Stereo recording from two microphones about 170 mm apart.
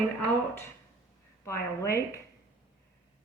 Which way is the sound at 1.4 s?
15° left (ahead or behind).